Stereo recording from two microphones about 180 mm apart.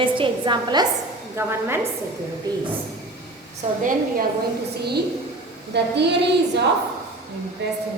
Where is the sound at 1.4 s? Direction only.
15° right (ahead or behind).